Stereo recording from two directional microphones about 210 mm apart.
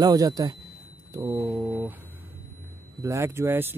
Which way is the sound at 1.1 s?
10° right (ahead or behind).